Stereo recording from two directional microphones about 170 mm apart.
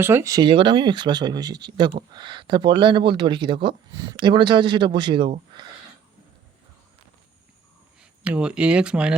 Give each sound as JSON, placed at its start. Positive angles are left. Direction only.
{"t": 0.0, "sound": "speech", "side_deg": -15}
{"t": 8.2, "sound": "speech", "side_deg": -5}